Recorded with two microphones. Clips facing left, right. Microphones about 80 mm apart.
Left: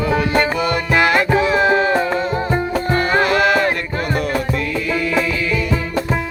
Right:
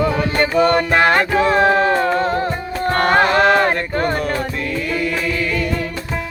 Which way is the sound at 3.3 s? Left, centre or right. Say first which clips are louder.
Right 2 dB; right.